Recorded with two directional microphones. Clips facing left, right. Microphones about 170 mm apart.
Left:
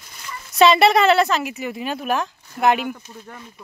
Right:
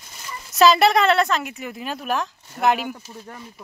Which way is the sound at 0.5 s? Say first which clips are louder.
Left 1 dB; centre (ahead or behind).